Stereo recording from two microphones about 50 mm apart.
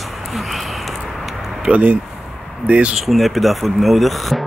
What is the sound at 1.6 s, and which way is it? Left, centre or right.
Speech, right.